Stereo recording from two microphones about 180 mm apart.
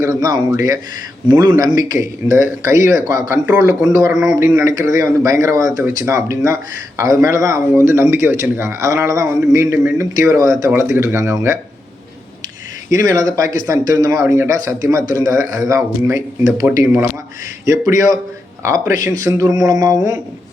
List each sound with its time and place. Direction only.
0.0 s speech: 20° right (ahead or behind)
12.9 s speech: 20° right (ahead or behind)